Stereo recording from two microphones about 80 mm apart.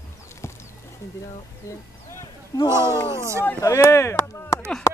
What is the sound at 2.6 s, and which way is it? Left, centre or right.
Speech, right.